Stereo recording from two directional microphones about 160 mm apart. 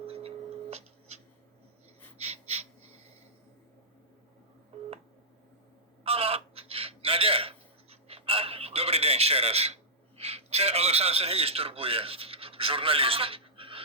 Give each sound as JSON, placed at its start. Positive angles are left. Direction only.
{"t": 0.0, "sound": "a sound", "side_deg": -35}
{"t": 2.1, "sound": "gasp", "side_deg": -40}
{"t": 6.0, "sound": "bird", "side_deg": -40}